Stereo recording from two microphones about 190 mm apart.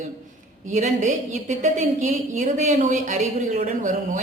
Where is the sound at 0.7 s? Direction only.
40° right (ahead or behind).